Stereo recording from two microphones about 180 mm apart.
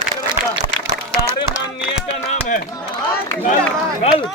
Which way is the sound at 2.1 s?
40° left (ahead or behind).